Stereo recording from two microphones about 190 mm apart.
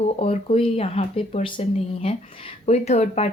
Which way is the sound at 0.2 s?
30° left (ahead or behind).